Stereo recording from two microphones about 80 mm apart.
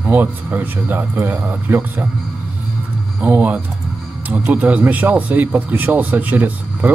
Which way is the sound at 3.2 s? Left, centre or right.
Centre.